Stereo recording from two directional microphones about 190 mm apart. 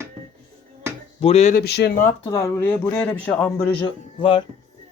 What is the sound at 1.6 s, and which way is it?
Speech, 60° left (ahead or behind).